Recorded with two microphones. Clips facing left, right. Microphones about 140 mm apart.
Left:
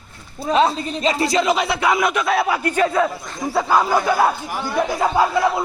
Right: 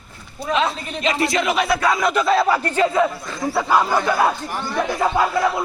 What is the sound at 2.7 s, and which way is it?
Speech, 10° right (ahead or behind).